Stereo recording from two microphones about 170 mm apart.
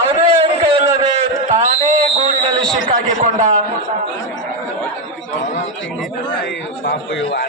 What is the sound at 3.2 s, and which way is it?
Speech, 45° right (ahead or behind).